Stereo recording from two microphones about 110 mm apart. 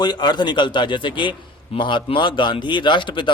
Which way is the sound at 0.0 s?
40° left (ahead or behind).